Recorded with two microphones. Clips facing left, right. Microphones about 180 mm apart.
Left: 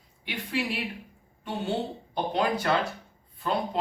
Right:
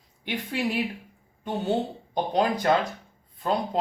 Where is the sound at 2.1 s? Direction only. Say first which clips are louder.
Right 3 dB; 40° right (ahead or behind).